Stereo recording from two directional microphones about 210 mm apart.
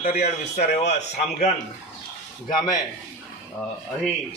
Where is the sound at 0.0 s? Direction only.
35° left (ahead or behind).